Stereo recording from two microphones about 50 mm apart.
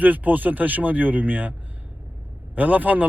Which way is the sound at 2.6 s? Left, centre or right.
Right.